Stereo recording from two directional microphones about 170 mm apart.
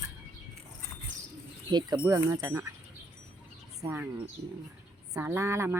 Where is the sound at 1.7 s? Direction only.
25° right (ahead or behind).